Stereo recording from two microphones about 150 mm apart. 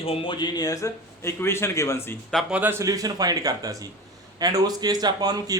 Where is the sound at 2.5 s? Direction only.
15° right (ahead or behind).